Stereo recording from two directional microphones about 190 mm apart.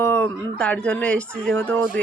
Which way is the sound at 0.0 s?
10° left (ahead or behind).